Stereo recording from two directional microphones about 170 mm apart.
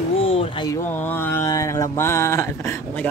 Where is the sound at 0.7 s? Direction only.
10° left (ahead or behind).